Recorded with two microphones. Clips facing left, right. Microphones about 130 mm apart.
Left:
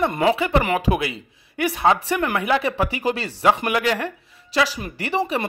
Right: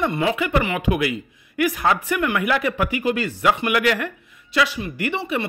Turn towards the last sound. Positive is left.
turn(degrees=35)  # may be behind; listen again after turning